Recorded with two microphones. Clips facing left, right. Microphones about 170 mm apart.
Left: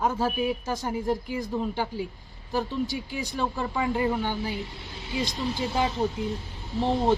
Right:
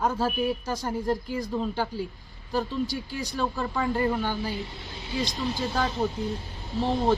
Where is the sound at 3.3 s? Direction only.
15° left (ahead or behind).